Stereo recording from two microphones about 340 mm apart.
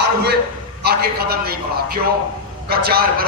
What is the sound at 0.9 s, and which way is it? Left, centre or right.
Speech, right.